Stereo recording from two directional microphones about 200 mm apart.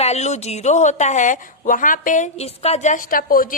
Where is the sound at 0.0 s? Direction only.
35° left (ahead or behind).